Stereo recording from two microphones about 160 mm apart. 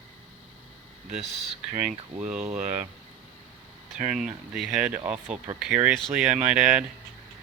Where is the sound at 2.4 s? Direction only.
50° right (ahead or behind).